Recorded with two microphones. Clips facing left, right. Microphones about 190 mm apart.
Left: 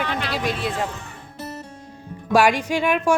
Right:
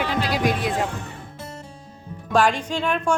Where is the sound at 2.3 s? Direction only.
10° left (ahead or behind).